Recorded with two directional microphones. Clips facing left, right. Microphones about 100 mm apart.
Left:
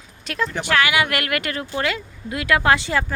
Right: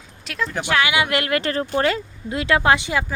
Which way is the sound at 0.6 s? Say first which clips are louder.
Even; 20° right (ahead or behind).